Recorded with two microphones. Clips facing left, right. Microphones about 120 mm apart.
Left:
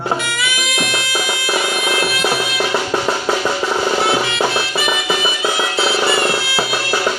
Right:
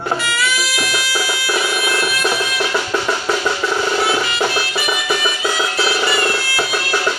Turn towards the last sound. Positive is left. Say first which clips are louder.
# left 1 dB
turn(degrees=25)  # may be behind; listen again after turning